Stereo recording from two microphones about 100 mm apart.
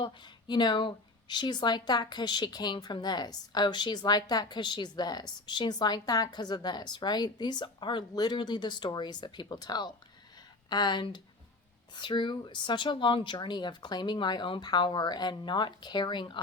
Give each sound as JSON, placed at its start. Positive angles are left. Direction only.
{"t": 0.0, "sound": "a woman's voice", "side_deg": 50}